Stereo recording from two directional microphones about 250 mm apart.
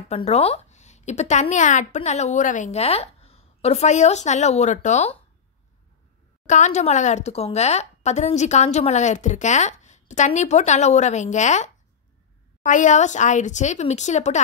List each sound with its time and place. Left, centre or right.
0.1 s speech: left
6.4 s speech: left